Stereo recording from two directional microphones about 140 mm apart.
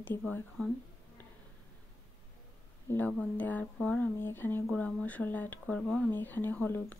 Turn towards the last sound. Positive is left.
turn(degrees=15)  # may be behind; listen again after turning